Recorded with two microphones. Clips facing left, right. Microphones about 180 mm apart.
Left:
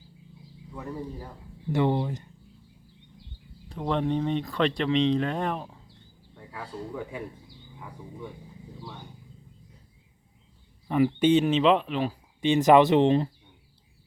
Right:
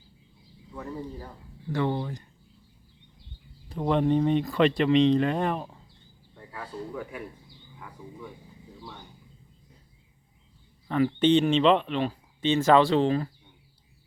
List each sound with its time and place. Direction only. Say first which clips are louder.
0.7 s speech: even; 5° left (ahead or behind)
1.7 s speech: left 3 dB; 20° left (ahead or behind)
3.7 s speech: right 3 dB; 5° right (ahead or behind)
10.8 s speech: left 1 dB; 10° left (ahead or behind)